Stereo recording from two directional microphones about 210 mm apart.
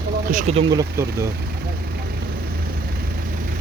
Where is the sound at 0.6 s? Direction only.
15° right (ahead or behind).